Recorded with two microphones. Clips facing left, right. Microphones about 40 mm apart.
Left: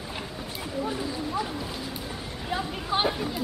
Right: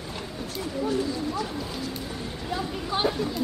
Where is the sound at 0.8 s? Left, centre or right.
Centre.